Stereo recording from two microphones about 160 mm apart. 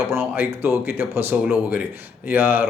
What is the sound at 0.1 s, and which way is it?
Speech, 15° right (ahead or behind).